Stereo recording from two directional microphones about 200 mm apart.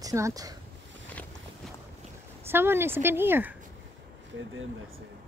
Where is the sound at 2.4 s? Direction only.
10° right (ahead or behind).